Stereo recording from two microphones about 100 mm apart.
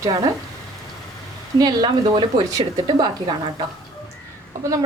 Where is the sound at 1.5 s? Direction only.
45° right (ahead or behind).